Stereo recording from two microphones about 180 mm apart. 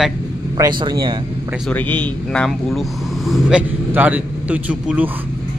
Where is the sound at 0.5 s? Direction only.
20° right (ahead or behind).